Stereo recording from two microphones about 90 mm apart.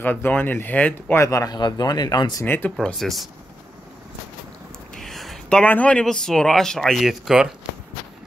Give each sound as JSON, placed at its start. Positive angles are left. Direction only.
{"t": 0.0, "sound": "speech", "side_deg": 20}
{"t": 1.1, "sound": "a man's voice", "side_deg": 35}
{"t": 1.5, "sound": "speech", "side_deg": 50}
{"t": 2.4, "sound": "speech", "side_deg": 25}
{"t": 2.8, "sound": "speech", "side_deg": 5}
{"t": 4.9, "sound": "a sound", "side_deg": 0}
{"t": 5.6, "sound": "speech", "side_deg": 15}